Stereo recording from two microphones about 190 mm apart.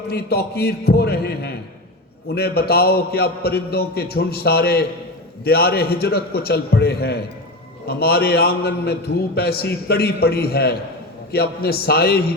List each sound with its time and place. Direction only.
0.1 s a man's voice: 55° left (ahead or behind)